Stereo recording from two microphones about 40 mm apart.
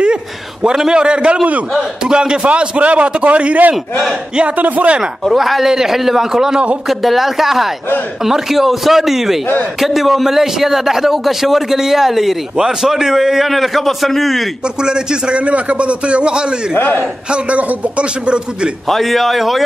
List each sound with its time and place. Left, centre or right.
0.0 s a man's voice: right
2.0 s a man's voice: right
5.2 s a man's voice: centre
14.8 s a man's voice: centre
16.7 s a man's voice: left
17.3 s a man's voice: right
18.9 s a man's voice: centre